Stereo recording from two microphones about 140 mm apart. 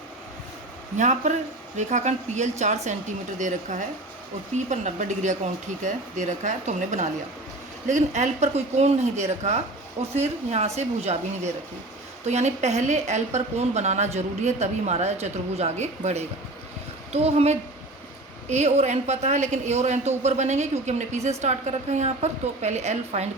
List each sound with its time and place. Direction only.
0.9 s a woman's voice: 55° right (ahead or behind)